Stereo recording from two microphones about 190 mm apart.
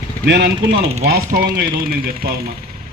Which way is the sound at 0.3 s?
60° right (ahead or behind).